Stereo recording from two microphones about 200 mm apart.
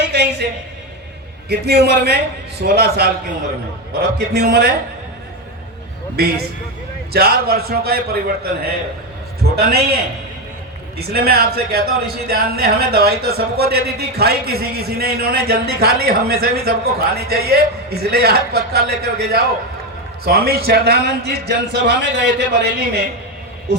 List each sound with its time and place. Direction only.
0.0 s a sound: 55° right (ahead or behind)
1.5 s speech: 55° right (ahead or behind)
6.1 s speech: 50° right (ahead or behind)
10.9 s speech: 50° right (ahead or behind)